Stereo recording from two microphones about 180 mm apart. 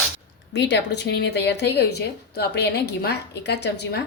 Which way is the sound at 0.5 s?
70° left (ahead or behind).